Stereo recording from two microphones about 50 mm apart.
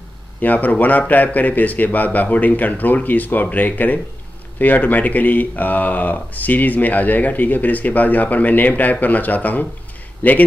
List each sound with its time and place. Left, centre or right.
0.4 s speech: left